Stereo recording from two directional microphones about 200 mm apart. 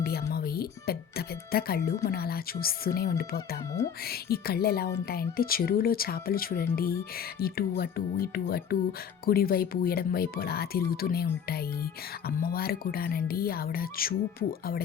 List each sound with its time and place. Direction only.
0.0 s music: 50° left (ahead or behind)
2.0 s speech: 50° left (ahead or behind)